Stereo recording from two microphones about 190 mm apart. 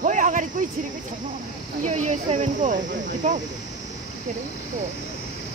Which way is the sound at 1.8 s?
40° right (ahead or behind).